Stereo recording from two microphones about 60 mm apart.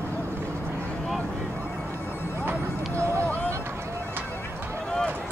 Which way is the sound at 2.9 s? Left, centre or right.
Right.